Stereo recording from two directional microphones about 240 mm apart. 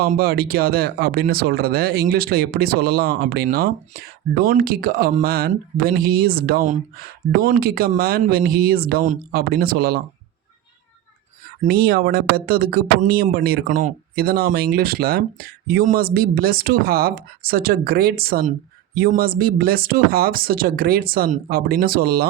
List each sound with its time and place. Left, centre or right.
0.0 s speech: right
11.7 s speech: right